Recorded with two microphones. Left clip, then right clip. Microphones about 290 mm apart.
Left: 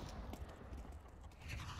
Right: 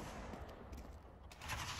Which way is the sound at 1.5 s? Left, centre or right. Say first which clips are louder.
Right 7 dB; centre.